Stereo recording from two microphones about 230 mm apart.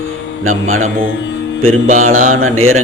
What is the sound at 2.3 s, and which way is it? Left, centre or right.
Speech, right.